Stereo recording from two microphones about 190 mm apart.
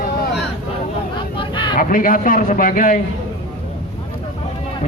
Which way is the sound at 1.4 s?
25° left (ahead or behind).